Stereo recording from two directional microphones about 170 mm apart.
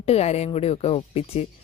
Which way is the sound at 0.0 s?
40° left (ahead or behind).